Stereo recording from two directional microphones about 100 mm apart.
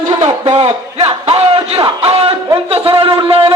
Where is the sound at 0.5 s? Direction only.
80° right.